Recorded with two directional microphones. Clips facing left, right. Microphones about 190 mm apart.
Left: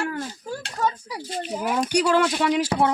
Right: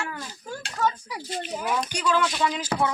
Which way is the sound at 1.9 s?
65° left (ahead or behind).